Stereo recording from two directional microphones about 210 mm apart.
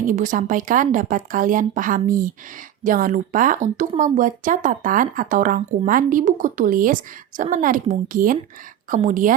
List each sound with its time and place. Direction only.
0.0 s speech: 40° right (ahead or behind)